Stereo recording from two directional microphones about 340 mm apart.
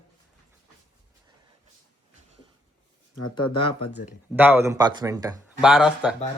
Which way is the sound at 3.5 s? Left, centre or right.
Centre.